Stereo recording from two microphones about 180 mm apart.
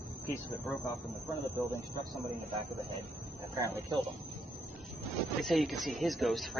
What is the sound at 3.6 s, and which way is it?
Speech, 15° right (ahead or behind).